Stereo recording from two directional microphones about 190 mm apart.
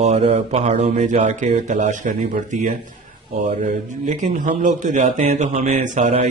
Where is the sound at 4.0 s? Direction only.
40° right (ahead or behind).